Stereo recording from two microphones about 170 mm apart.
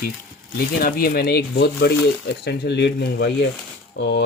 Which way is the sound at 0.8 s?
60° left (ahead or behind).